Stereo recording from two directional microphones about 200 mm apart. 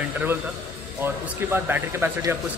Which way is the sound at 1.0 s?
10° right (ahead or behind).